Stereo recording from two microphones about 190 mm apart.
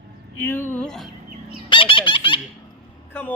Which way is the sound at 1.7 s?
25° left (ahead or behind).